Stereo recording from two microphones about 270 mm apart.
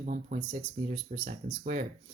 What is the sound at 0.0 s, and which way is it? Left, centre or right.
Speech, right.